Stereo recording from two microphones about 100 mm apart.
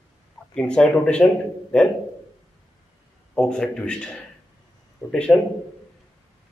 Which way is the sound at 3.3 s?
5° left (ahead or behind).